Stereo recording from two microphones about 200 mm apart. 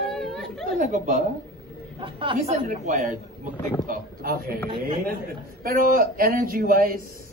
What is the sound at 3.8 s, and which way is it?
Speech, 45° right (ahead or behind).